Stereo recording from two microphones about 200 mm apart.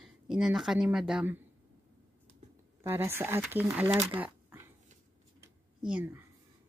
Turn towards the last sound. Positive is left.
turn(degrees=-5)  # may be behind; listen again after turning